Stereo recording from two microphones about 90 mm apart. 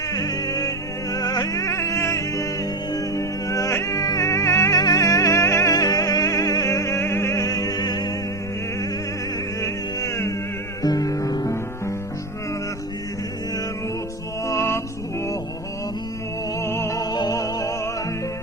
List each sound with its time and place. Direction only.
0.1 s music: 40° left (ahead or behind)
5.7 s music: 45° left (ahead or behind)
9.6 s music: 35° left (ahead or behind)
14.4 s music: 30° left (ahead or behind)
16.6 s music: 30° left (ahead or behind)
17.0 s music: 45° left (ahead or behind)